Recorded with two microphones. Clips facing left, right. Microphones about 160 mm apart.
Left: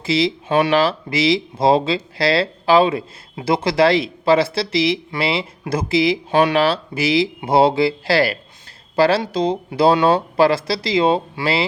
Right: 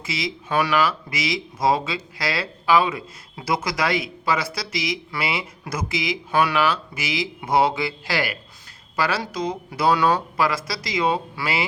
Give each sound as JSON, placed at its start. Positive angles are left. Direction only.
{"t": 0.0, "sound": "speech", "side_deg": 30}